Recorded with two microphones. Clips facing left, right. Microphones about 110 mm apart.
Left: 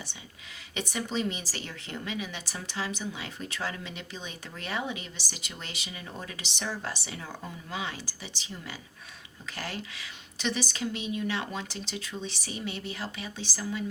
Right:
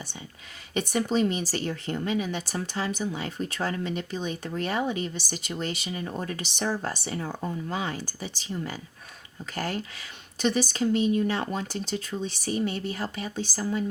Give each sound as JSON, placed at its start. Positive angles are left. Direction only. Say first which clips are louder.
{"t": 0.7, "sound": "speech", "louder": "right 7 dB", "side_deg": -45}